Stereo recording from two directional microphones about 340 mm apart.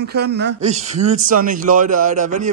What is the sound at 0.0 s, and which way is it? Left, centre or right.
Speech, right.